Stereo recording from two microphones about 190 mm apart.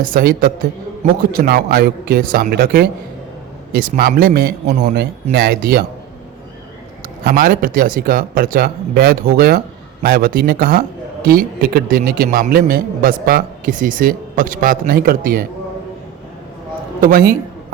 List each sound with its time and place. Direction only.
0.0 s a man's voice: 50° right (ahead or behind)
4.6 s speech: 35° right (ahead or behind)
4.9 s speech: 60° right (ahead or behind)
7.3 s a man's voice: 50° right (ahead or behind)
17.0 s a man's voice: 50° right (ahead or behind)